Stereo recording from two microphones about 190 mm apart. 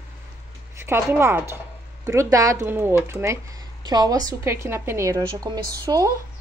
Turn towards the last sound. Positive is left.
turn(degrees=-15)  # may be behind; listen again after turning